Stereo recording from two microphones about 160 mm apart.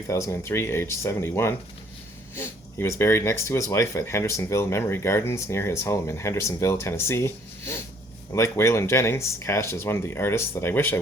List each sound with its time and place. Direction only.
0.1 s speech: 20° left (ahead or behind)